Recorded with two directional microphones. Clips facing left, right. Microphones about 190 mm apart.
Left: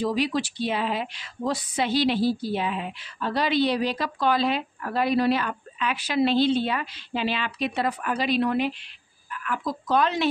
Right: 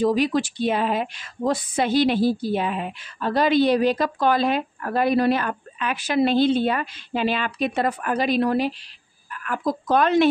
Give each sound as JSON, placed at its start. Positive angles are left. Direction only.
{"t": 0.0, "sound": "a woman's voice", "side_deg": -50}